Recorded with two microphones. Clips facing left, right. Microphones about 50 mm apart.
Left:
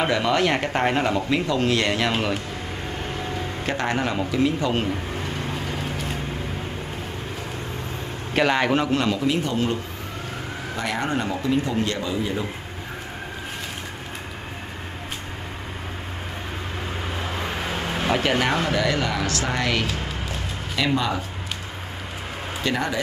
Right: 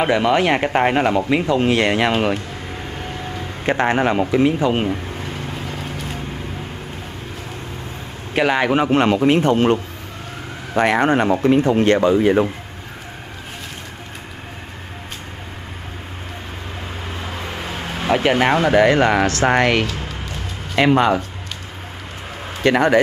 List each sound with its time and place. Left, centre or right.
0.0 s speech: centre
3.0 s vehicle: centre
3.6 s speech: right
5.5 s a sound: centre
8.4 s speech: centre
8.8 s speech: right
17.2 s vehicle: centre
18.1 s speech: centre
18.4 s speech: right
22.6 s speech: right